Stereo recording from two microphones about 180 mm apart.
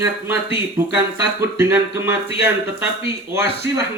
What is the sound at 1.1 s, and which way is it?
Speech, 15° right (ahead or behind).